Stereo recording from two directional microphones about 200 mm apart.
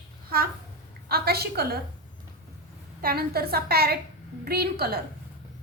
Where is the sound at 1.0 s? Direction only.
50° right (ahead or behind).